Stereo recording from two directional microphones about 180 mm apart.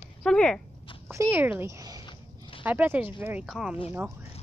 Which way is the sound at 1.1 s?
15° right (ahead or behind).